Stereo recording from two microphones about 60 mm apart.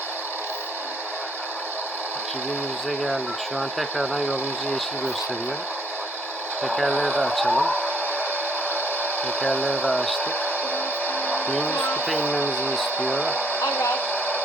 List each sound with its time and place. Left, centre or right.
3.6 s speech: centre
6.9 s speech: left
9.2 s speech: left
11.0 s a sound: left
12.0 s speech: left
13.8 s a sound: left